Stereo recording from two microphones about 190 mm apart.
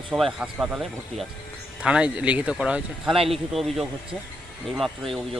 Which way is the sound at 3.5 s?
Centre (ahead or behind).